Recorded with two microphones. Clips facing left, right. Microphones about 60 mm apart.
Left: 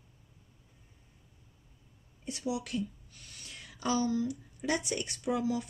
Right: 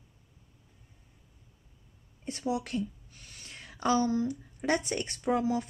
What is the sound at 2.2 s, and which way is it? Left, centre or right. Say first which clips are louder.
Speech: right 3 dB; right.